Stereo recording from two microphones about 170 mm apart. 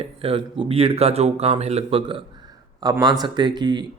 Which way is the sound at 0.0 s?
35° right (ahead or behind).